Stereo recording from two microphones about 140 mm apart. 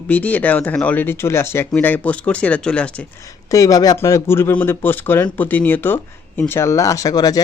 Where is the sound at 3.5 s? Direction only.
25° left (ahead or behind).